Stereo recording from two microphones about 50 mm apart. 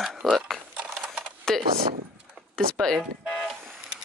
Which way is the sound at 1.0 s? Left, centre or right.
Right.